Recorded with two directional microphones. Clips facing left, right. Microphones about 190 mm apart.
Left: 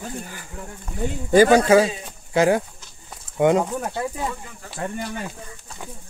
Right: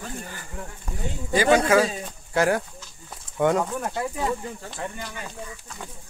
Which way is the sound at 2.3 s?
20° left (ahead or behind).